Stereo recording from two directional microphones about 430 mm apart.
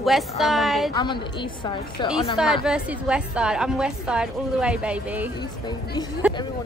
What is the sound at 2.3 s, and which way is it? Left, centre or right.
A woman's voice, centre.